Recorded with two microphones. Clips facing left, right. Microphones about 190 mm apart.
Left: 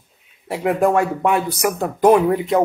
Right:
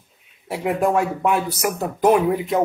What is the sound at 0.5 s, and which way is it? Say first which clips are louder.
Speech: left 3 dB; centre (ahead or behind).